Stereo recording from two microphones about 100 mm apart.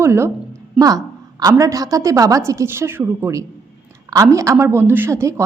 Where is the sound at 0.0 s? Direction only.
25° right (ahead or behind).